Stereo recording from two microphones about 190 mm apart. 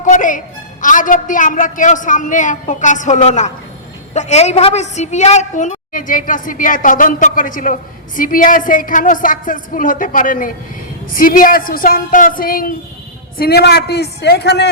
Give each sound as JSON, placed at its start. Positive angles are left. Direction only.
{"t": 0.0, "sound": "a woman's voice", "side_deg": 40}